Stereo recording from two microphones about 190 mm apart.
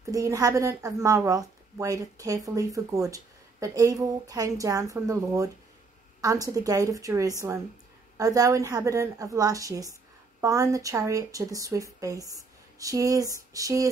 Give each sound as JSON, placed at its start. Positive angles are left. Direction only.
{"t": 0.1, "sound": "a woman's voice", "side_deg": -20}